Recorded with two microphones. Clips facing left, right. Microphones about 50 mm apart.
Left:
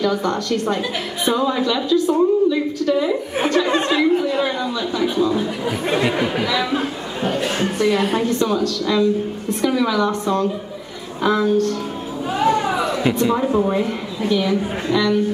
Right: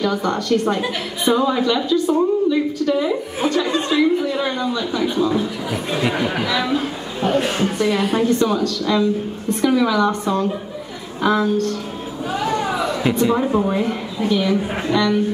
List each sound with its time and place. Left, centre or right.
0.0 s a woman's voice: centre
4.6 s a woman's voice: centre
6.7 s a woman's voice: centre